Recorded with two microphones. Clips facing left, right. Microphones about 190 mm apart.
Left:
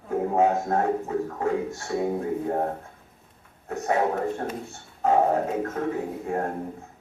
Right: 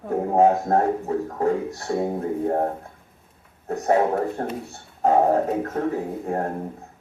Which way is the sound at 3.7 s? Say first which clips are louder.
Right 4 dB; 35° right (ahead or behind).